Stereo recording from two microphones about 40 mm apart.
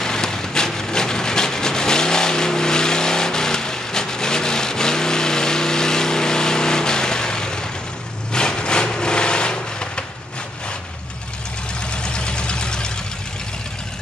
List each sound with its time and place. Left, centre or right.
0.0 s a sound: centre
8.3 s vehicle: centre
11.9 s vehicle: left